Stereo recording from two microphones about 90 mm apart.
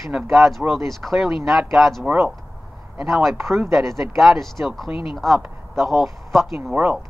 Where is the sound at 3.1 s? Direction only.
Centre (ahead or behind).